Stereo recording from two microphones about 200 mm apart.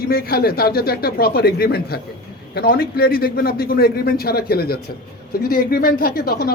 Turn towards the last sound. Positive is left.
turn(degrees=50)  # may be behind; listen again after turning